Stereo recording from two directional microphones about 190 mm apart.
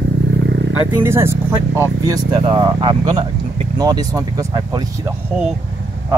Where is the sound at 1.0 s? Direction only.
15° right (ahead or behind).